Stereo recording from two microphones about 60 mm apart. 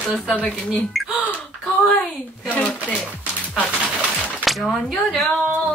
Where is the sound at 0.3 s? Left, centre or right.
Left.